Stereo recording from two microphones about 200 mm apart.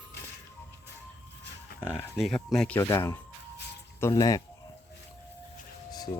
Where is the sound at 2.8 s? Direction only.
15° left (ahead or behind).